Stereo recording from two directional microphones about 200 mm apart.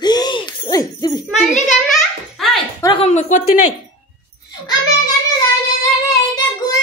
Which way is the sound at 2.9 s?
35° left (ahead or behind).